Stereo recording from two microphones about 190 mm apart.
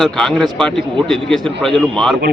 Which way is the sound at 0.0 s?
Centre (ahead or behind).